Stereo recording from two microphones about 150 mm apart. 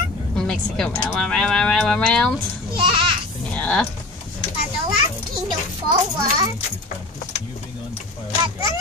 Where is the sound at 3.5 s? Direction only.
10° left (ahead or behind).